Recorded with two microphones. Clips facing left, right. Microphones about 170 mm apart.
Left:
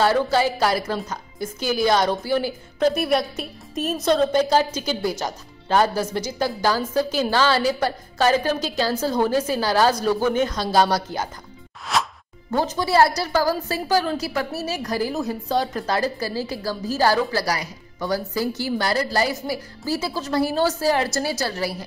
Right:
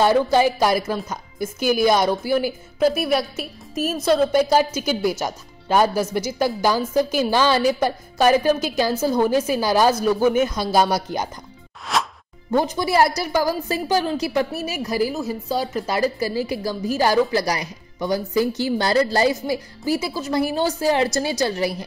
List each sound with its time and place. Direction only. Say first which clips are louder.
0.0 s a woman's voice: right 3 dB; 15° right (ahead or behind)
11.8 s music: even; centre (ahead or behind)
12.4 s a woman's voice: right 2 dB; 15° right (ahead or behind)